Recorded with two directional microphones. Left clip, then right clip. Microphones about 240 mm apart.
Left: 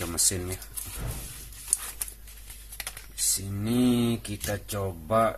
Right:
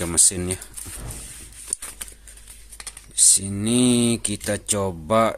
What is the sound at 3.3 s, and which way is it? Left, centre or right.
Speech, right.